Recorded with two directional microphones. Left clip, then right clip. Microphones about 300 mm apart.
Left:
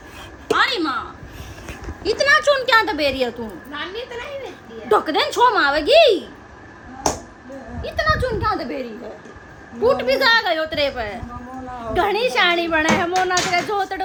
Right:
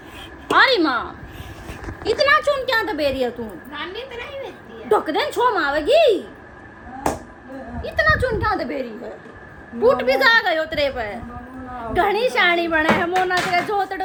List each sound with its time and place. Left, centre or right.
0.4 s a sound: centre
2.0 s speech: left
2.6 s a woman's voice: centre
4.9 s a woman's voice: centre
7.8 s a woman's voice: centre